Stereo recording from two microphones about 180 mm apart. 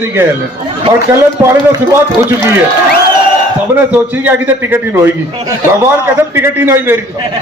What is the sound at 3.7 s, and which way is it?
A man's voice, 10° right (ahead or behind).